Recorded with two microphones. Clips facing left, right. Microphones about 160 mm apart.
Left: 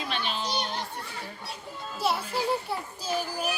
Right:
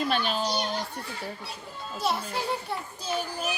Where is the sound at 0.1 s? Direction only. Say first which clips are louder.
Right 5 dB; 45° right (ahead or behind).